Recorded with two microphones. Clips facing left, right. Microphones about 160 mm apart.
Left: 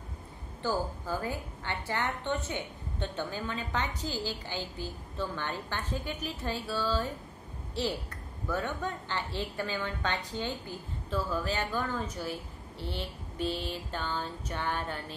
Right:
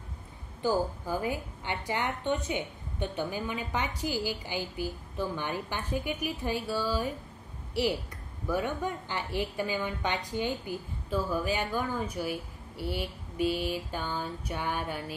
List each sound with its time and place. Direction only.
0.6 s a woman's voice: 15° right (ahead or behind)